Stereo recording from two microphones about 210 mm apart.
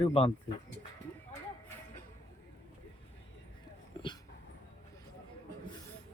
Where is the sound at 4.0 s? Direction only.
20° left (ahead or behind).